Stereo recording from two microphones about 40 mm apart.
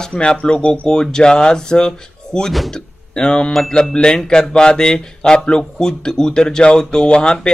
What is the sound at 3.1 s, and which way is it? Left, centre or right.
Mantra, left.